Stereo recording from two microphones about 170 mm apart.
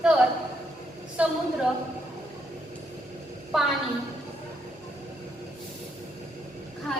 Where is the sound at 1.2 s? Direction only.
5° right (ahead or behind).